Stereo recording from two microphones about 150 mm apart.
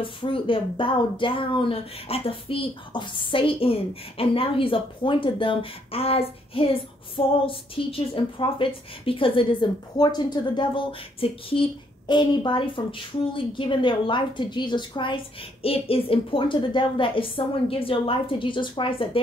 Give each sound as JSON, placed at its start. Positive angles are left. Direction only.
{"t": 0.0, "sound": "speech", "side_deg": 35}